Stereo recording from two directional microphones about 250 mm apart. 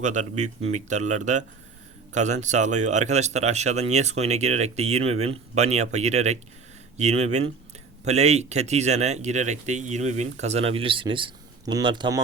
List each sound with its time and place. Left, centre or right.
0.0 s speech: right